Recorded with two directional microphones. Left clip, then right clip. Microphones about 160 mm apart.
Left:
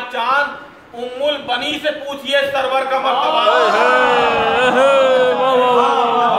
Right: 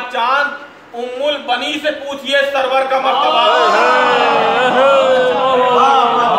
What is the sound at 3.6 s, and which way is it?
Speech, 25° left (ahead or behind).